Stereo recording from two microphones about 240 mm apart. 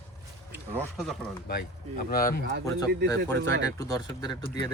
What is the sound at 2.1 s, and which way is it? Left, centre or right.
Speech, left.